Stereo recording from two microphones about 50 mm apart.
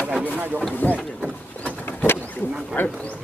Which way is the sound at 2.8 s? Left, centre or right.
Left.